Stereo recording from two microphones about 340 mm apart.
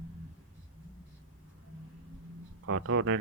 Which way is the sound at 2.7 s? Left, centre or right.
Right.